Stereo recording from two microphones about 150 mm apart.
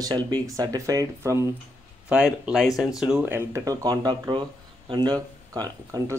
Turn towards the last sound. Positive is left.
turn(degrees=-25)  # may be behind; listen again after turning